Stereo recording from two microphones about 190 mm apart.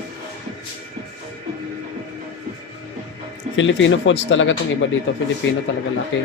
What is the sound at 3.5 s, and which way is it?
Speech, 80° left.